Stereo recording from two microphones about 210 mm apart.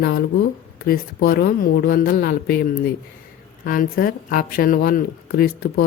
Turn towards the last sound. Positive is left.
turn(degrees=45)  # may be behind; listen again after turning